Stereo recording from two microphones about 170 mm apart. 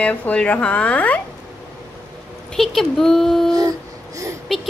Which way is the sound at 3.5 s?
20° right (ahead or behind).